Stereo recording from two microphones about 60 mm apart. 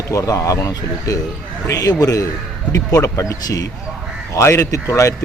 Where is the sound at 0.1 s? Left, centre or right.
Left.